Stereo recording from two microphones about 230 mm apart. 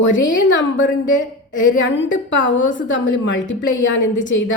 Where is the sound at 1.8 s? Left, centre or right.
Left.